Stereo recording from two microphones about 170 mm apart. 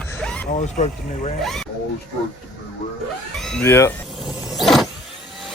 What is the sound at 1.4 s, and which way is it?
Speech, centre (ahead or behind).